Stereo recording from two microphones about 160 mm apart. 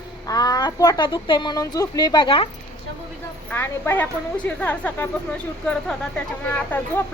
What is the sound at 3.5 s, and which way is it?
A woman's voice, 15° left (ahead or behind).